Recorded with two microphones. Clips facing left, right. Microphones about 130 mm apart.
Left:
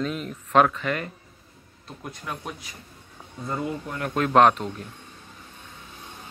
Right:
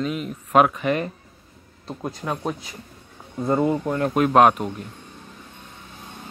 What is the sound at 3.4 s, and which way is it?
Speech, 50° right (ahead or behind).